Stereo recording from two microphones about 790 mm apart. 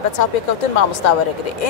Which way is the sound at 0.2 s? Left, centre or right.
Left.